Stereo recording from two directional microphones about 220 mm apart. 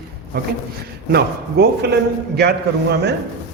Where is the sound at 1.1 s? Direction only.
50° right (ahead or behind).